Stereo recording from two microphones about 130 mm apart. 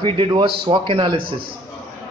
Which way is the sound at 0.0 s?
40° right (ahead or behind).